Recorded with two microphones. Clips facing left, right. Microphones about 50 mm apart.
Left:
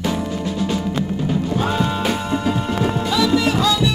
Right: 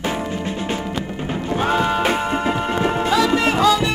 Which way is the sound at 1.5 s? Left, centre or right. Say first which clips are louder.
Right 6 dB; right.